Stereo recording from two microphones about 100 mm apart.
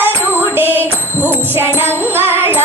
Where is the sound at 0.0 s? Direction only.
20° right (ahead or behind).